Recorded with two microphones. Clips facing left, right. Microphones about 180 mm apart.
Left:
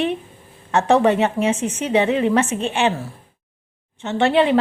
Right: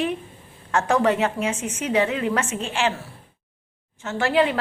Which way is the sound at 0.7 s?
20° left (ahead or behind).